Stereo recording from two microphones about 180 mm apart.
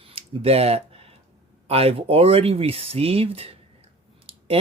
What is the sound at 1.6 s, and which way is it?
Speech, 35° right (ahead or behind).